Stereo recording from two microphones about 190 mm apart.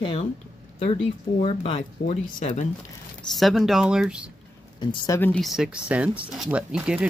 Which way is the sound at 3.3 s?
Centre (ahead or behind).